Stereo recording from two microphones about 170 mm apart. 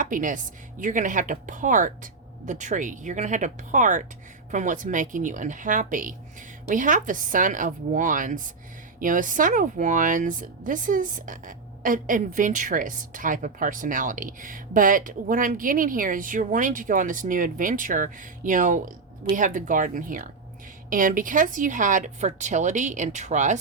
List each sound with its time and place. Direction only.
0.0 s a woman's voice: 50° right (ahead or behind)